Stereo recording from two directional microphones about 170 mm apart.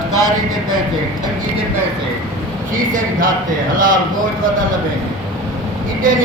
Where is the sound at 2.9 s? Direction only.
50° right (ahead or behind).